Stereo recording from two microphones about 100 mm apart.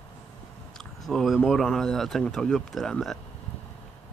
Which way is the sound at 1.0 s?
Centre (ahead or behind).